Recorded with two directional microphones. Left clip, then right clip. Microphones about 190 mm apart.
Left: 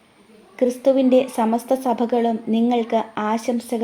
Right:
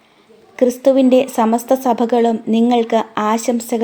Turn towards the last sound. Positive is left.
turn(degrees=-30)  # may be behind; listen again after turning